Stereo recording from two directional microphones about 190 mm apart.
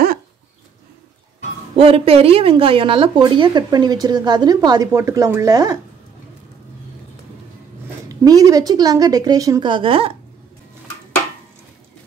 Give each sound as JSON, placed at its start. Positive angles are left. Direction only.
{"t": 1.8, "sound": "a woman's voice", "side_deg": -30}
{"t": 8.1, "sound": "a woman's voice", "side_deg": -20}